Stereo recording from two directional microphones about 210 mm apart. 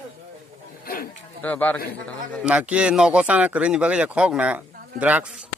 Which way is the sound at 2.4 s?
5° right (ahead or behind).